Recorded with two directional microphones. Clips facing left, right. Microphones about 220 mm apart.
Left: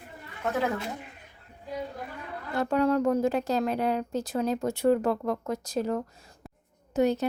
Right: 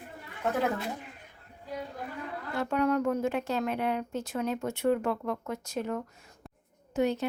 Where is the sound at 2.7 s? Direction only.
30° left (ahead or behind).